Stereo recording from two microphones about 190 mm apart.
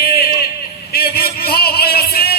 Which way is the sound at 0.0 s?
55° left (ahead or behind).